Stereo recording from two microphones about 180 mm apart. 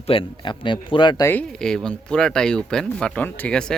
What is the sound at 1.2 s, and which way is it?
Speech, 5° left (ahead or behind).